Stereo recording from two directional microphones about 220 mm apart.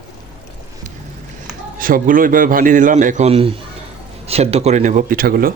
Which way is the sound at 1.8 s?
40° right (ahead or behind).